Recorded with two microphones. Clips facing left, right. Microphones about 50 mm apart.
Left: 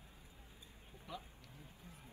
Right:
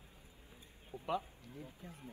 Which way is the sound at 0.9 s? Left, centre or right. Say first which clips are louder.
Right 14 dB; right.